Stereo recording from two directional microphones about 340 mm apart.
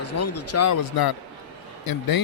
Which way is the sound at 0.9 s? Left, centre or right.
Left.